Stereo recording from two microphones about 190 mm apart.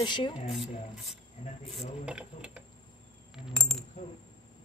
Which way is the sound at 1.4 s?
35° left (ahead or behind).